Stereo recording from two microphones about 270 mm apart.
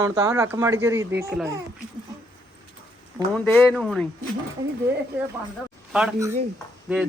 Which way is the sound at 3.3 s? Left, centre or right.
Centre.